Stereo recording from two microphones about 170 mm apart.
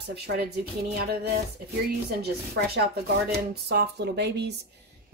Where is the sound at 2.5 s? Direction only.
70° right (ahead or behind).